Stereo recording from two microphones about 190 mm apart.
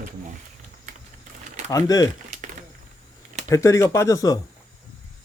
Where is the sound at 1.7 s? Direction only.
20° left (ahead or behind).